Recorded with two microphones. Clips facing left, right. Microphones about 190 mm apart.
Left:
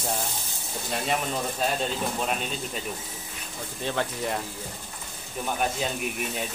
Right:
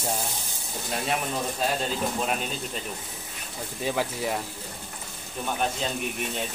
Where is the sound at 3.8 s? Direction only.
5° right (ahead or behind).